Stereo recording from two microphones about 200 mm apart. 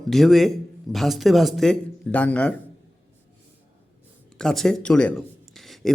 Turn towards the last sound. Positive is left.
turn(degrees=0)  # may be behind; listen again after turning